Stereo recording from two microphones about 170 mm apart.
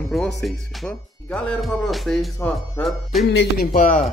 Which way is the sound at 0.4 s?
5° left (ahead or behind).